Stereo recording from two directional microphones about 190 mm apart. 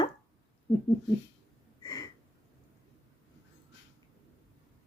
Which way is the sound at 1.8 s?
20° left (ahead or behind).